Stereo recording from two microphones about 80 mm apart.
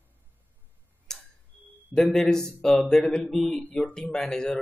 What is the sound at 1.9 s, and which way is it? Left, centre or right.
A man's voice, centre.